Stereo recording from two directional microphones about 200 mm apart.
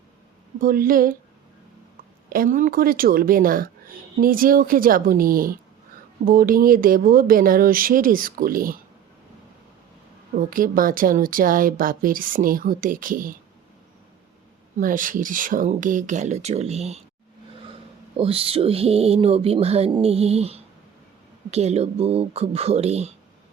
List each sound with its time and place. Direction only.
0.6 s speech: 45° right (ahead or behind)
2.3 s speech: 40° right (ahead or behind)
10.5 s speech: 45° right (ahead or behind)
14.8 s speech: 40° right (ahead or behind)
18.2 s a sound: 30° right (ahead or behind)
21.5 s speech: 30° right (ahead or behind)